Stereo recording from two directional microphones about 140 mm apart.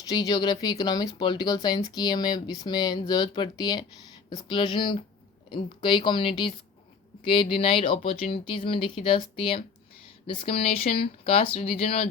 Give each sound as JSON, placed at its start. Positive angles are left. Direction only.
{"t": 0.0, "sound": "speech", "side_deg": 25}
{"t": 7.5, "sound": "speech", "side_deg": 40}